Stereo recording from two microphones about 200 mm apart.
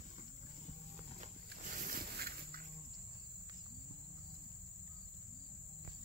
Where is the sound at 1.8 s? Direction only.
45° right (ahead or behind).